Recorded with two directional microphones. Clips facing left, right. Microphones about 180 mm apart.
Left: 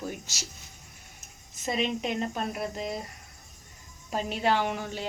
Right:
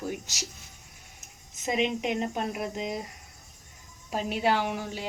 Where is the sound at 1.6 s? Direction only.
15° right (ahead or behind).